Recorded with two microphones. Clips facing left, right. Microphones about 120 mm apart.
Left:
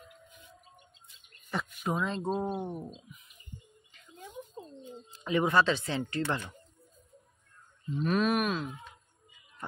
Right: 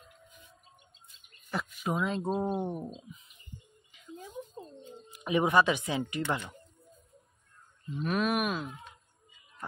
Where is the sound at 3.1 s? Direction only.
30° right (ahead or behind).